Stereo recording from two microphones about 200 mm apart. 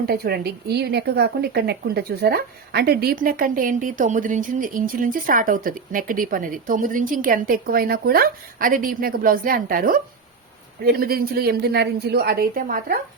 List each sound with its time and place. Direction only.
0.0 s speech: 50° right (ahead or behind)